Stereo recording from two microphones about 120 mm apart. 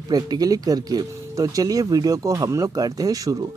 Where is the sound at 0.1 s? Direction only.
35° right (ahead or behind).